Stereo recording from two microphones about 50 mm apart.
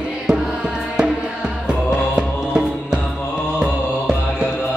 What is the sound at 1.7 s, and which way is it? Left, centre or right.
Music, centre.